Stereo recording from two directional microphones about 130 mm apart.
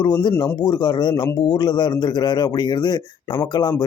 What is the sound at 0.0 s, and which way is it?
Speech, 35° left (ahead or behind).